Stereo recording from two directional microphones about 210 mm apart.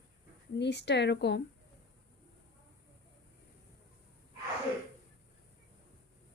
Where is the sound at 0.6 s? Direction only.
55° left (ahead or behind).